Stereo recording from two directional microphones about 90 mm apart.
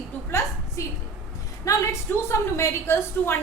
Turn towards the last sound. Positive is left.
turn(degrees=30)  # may be behind; listen again after turning